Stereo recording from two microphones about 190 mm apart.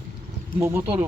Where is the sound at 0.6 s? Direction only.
10° right (ahead or behind).